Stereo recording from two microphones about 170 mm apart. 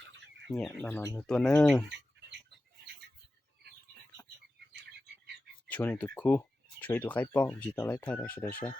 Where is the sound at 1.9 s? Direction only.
90° right.